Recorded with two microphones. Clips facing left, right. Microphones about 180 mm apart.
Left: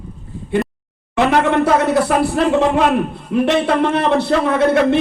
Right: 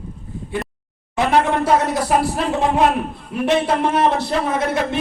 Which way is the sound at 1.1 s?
70° left (ahead or behind).